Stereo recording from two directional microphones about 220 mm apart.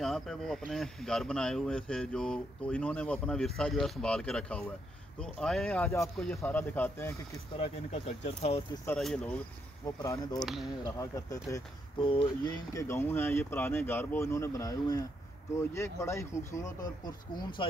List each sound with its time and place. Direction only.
0.0 s speech: centre (ahead or behind)
7.5 s speech: 25° left (ahead or behind)
8.8 s speech: 5° left (ahead or behind)
10.0 s speech: 15° left (ahead or behind)
10.4 s speech: centre (ahead or behind)
10.8 s speech: 15° left (ahead or behind)
12.0 s speech: 25° left (ahead or behind)